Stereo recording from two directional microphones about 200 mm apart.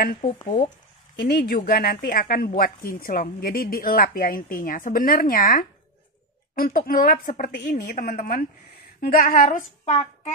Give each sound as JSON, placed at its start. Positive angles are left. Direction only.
{"t": 0.2, "sound": "speech", "side_deg": 25}
{"t": 1.1, "sound": "a woman's voice", "side_deg": 50}